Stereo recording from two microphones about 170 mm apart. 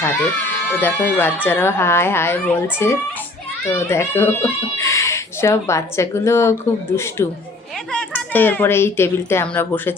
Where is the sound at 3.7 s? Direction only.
15° left (ahead or behind).